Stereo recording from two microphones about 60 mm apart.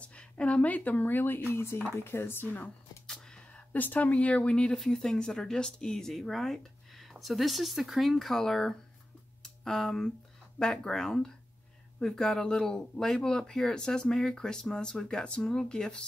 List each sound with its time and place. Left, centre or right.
0.0 s speech: centre; by 2.4 s left
2.4 s speech: left
3.1 s a sound: centre
3.7 s speech: left; by 8.7 s centre
9.4 s a sound: centre
10.6 s speech: centre